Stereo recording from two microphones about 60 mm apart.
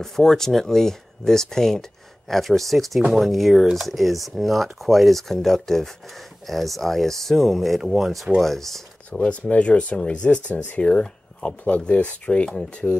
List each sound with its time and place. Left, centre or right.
0.0 s speech: centre
9.2 s speech: left